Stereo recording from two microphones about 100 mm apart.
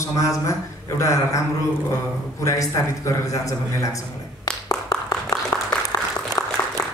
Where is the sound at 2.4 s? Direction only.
30° left (ahead or behind).